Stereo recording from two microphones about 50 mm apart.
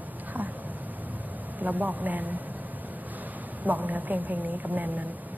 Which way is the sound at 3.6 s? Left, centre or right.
Right.